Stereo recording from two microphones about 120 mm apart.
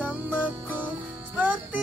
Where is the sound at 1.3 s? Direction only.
10° right (ahead or behind).